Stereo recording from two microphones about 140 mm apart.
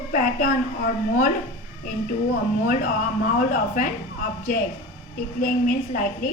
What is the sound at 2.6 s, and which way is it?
Speech, 70° left (ahead or behind).